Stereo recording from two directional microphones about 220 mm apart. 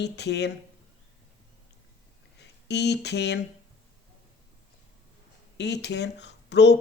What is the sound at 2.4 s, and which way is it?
Speech, 50° left (ahead or behind).